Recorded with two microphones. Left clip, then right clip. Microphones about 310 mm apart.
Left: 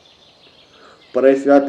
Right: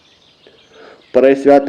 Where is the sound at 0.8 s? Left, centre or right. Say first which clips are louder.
Right 5 dB; right.